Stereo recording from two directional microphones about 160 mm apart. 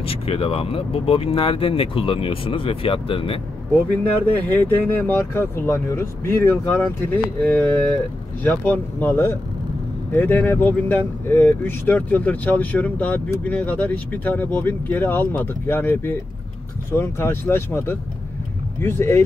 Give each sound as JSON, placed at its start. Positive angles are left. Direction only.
{"t": 0.0, "sound": "speech", "side_deg": 35}
{"t": 4.4, "sound": "speech", "side_deg": 10}